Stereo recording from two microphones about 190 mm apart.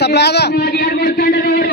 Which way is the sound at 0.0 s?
60° left (ahead or behind).